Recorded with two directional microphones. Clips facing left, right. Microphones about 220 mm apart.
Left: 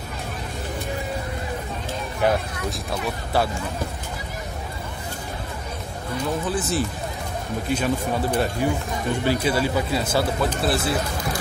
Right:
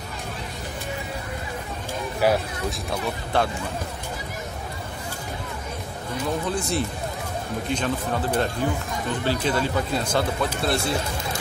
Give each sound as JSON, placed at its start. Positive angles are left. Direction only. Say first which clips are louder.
{"t": 2.2, "sound": "speech", "louder": "even", "side_deg": -5}
{"t": 3.3, "sound": "speech", "louder": "left 1 dB", "side_deg": 5}
{"t": 6.5, "sound": "speech", "louder": "left 1 dB", "side_deg": 5}